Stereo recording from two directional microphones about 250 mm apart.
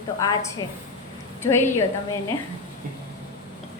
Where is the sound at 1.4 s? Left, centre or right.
Centre.